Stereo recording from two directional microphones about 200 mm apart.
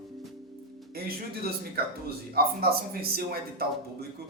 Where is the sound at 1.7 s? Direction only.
50° right (ahead or behind).